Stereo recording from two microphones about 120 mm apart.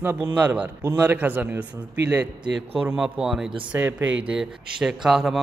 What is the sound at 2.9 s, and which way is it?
Speech, 5° right (ahead or behind).